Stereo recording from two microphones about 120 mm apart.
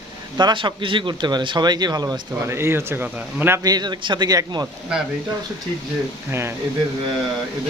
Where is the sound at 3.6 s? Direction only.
35° right (ahead or behind).